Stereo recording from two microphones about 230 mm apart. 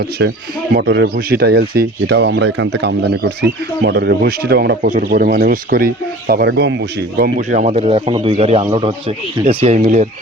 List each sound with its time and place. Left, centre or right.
0.7 s speech: right
6.5 s speech: right
7.2 s a man's voice: right